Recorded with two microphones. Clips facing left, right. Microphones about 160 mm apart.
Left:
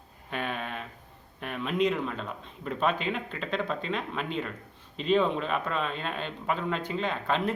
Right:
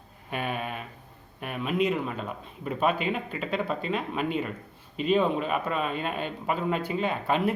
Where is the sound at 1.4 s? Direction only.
5° right (ahead or behind).